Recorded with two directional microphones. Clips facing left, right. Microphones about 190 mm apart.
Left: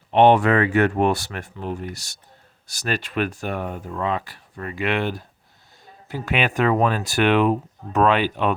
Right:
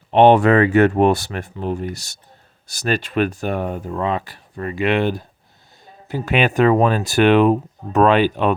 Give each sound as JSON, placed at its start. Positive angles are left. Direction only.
{"t": 0.1, "sound": "speech", "side_deg": -30}